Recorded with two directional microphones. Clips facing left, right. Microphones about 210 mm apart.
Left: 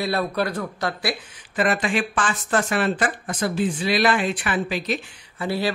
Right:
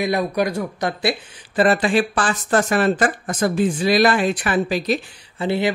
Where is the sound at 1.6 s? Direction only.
35° right (ahead or behind).